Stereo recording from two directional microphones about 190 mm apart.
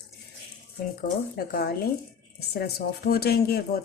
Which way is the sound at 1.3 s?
55° left (ahead or behind).